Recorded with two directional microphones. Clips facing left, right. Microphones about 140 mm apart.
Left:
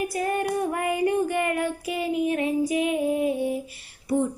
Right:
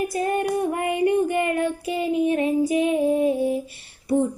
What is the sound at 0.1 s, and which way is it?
Child singing, 25° right (ahead or behind).